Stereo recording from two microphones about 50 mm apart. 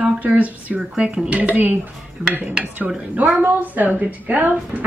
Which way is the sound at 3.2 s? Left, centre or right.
Right.